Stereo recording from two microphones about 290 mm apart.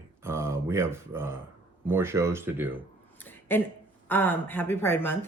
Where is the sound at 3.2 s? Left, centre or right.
Centre.